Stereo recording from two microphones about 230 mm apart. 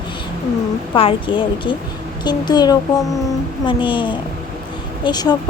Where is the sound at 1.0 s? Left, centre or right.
Left.